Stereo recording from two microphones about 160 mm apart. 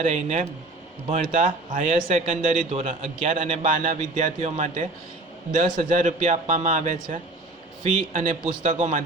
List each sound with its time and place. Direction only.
0.0 s a man's voice: 45° right (ahead or behind)